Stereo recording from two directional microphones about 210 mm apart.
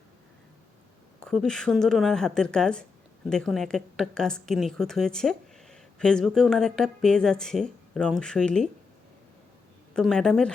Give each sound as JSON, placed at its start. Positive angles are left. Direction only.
{"t": 1.2, "sound": "speech", "side_deg": 0}
{"t": 9.9, "sound": "speech", "side_deg": 5}